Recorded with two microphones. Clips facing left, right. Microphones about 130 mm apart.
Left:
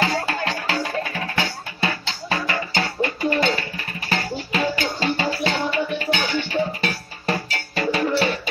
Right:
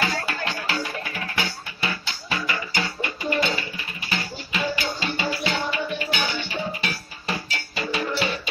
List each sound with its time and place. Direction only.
0.0 s music: 30° left (ahead or behind)